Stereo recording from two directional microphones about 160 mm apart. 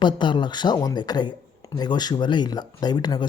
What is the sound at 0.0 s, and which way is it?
Speech, 30° left (ahead or behind).